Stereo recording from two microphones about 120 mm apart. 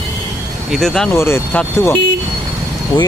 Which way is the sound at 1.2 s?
20° left (ahead or behind).